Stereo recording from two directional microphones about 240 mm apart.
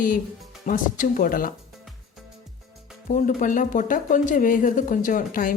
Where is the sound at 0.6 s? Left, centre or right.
Left.